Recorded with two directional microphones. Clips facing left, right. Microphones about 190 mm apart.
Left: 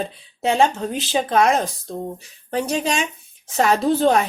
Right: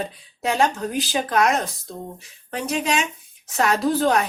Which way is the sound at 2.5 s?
35° left (ahead or behind).